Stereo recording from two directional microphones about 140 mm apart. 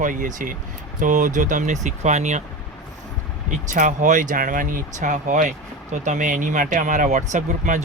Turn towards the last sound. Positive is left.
turn(degrees=-60)  # may be behind; listen again after turning